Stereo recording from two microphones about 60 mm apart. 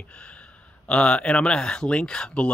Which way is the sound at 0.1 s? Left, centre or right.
Centre.